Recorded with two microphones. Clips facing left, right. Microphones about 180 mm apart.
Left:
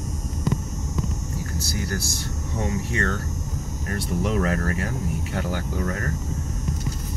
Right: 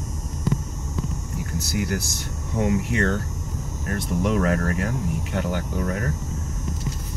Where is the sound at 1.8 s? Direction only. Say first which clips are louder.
Right 3 dB; 15° right (ahead or behind).